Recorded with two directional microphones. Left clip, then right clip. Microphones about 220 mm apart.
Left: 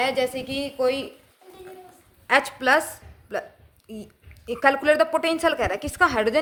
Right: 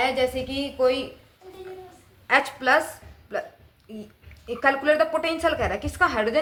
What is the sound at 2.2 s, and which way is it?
A woman's voice, 50° left (ahead or behind).